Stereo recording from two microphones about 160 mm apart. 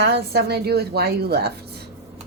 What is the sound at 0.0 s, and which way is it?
A woman's voice, 90° right.